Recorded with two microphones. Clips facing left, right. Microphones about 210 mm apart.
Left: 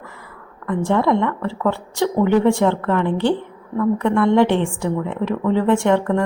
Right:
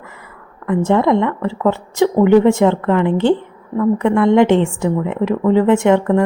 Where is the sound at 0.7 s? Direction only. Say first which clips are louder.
Right 4 dB; 20° right (ahead or behind).